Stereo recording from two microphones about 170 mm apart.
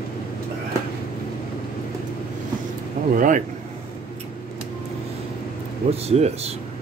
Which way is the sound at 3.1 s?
50° right (ahead or behind).